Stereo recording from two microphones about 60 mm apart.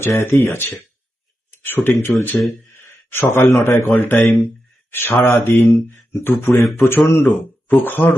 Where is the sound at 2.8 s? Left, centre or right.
Left.